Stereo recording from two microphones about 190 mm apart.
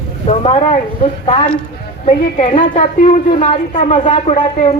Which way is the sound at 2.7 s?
40° left (ahead or behind).